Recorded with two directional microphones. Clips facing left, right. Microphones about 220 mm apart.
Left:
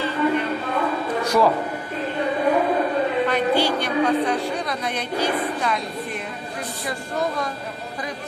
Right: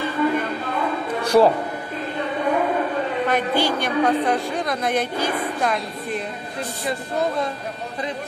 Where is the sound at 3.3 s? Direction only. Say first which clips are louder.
Left 1 dB; 45° right (ahead or behind).